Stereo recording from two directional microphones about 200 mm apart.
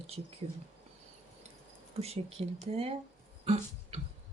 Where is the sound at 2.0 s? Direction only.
30° right (ahead or behind).